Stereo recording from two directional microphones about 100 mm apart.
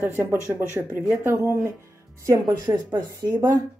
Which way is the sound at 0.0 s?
25° right (ahead or behind).